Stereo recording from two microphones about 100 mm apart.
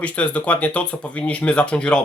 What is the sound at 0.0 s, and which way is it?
Speech, 15° left (ahead or behind).